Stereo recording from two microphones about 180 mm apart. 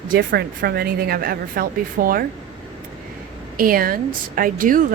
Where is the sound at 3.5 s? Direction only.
55° right (ahead or behind).